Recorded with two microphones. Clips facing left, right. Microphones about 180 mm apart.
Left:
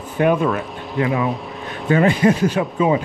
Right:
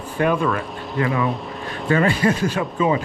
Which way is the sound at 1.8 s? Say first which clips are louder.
Left 3 dB; 20° left (ahead or behind).